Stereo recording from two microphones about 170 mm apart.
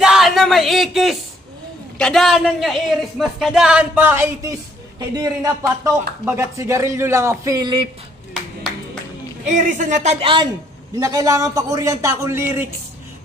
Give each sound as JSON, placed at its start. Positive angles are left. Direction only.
{"t": 0.0, "sound": "a sound", "side_deg": 0}
{"t": 2.0, "sound": "a man's voice", "side_deg": 0}
{"t": 9.5, "sound": "a woman's voice", "side_deg": -45}
{"t": 10.2, "sound": "speech", "side_deg": -30}